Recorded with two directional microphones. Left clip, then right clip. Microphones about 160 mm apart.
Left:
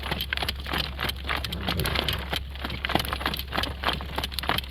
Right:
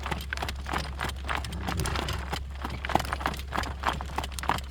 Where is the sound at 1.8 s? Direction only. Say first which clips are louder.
Left 6 dB; 40° left (ahead or behind).